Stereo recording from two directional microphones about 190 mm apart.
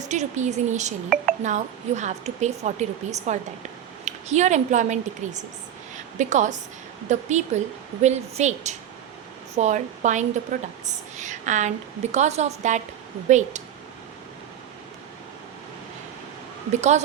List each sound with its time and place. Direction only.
0.1 s speech: 40° right (ahead or behind)
16.7 s speech: 40° right (ahead or behind)